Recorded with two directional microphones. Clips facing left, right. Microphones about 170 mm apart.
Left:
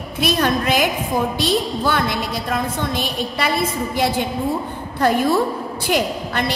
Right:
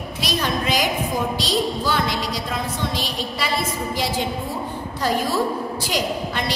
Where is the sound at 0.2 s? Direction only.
55° left (ahead or behind).